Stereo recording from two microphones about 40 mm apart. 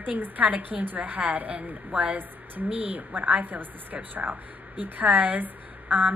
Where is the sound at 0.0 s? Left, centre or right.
Right.